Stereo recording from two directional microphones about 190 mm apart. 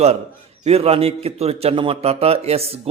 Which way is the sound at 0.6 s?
30° right (ahead or behind).